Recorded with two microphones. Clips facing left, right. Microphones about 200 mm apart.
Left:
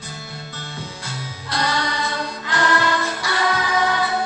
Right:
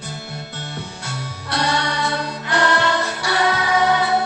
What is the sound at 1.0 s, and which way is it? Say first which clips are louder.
Music: right 2 dB; 70° right (ahead or behind).